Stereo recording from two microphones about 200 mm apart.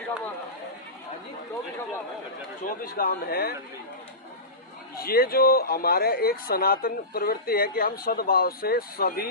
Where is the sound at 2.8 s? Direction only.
45° left (ahead or behind).